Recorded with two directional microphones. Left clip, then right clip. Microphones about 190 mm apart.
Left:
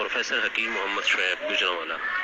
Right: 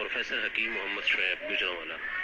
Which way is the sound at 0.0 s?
25° left (ahead or behind).